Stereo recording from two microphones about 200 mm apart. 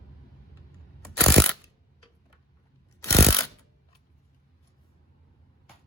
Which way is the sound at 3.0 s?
15° left (ahead or behind).